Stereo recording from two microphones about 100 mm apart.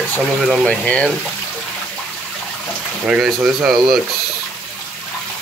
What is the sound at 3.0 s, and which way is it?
Speech, 5° right (ahead or behind).